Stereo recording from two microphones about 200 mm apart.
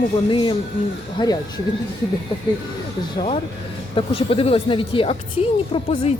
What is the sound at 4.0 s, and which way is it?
A woman's voice, 30° left (ahead or behind).